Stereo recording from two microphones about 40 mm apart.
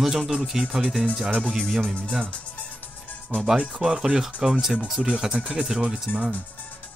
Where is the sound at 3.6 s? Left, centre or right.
Centre.